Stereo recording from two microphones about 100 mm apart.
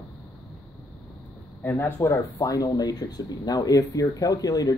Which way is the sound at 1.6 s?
20° left (ahead or behind).